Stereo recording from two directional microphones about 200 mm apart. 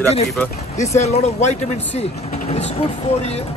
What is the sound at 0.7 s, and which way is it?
Speech, 35° left (ahead or behind).